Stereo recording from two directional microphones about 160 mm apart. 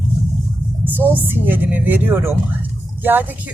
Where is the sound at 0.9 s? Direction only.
10° right (ahead or behind).